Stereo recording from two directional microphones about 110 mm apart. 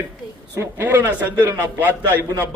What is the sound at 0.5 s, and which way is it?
A man's voice, 20° right (ahead or behind).